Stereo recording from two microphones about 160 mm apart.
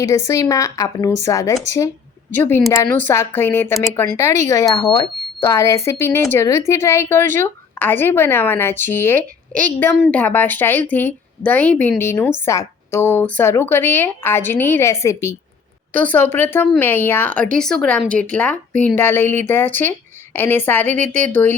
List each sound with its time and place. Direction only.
0.3 s a woman's voice: 20° left (ahead or behind)